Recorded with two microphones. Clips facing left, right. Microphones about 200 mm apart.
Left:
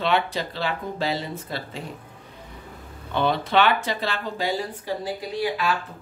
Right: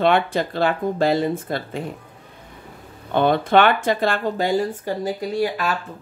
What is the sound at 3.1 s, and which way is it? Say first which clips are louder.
Speech: right 5 dB; 50° right (ahead or behind).